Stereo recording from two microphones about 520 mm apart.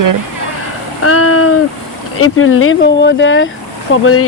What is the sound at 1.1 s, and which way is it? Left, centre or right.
Speech, left.